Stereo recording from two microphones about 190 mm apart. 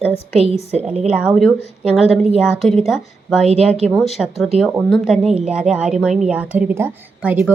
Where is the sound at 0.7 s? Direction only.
35° right (ahead or behind).